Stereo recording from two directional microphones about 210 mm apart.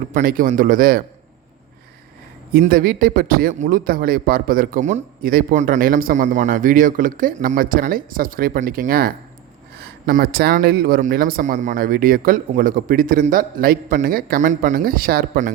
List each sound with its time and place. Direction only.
0.1 s a man's voice: 40° right (ahead or behind)
2.5 s a man's voice: 45° right (ahead or behind)